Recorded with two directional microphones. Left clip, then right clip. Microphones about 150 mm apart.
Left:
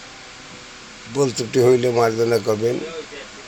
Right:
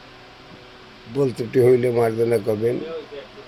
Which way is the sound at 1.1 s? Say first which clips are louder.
Left 1 dB; 15° right (ahead or behind).